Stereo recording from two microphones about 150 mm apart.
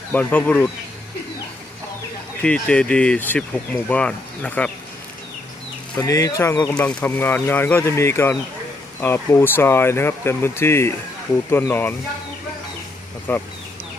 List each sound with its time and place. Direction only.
0.1 s speech: 10° left (ahead or behind)
2.4 s speech: 10° left (ahead or behind)
6.0 s speech: 25° left (ahead or behind)
13.3 s speech: 10° left (ahead or behind)